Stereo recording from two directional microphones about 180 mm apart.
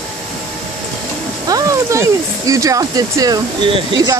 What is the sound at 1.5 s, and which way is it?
Speech, 20° right (ahead or behind).